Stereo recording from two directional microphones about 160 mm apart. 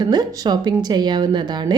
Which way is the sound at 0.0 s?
25° right (ahead or behind).